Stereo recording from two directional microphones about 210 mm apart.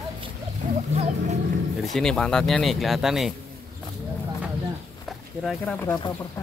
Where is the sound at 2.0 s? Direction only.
Centre (ahead or behind).